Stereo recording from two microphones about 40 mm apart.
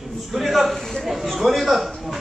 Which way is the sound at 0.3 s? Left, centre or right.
Centre.